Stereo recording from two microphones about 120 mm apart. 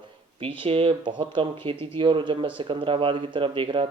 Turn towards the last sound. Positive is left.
turn(degrees=-45)  # may be behind; listen again after turning